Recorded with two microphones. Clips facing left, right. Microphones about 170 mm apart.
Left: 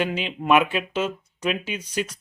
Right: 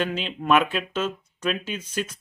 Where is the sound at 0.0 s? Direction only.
10° left (ahead or behind).